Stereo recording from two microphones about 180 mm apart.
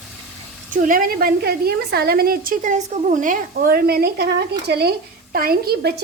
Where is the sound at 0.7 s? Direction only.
50° right (ahead or behind).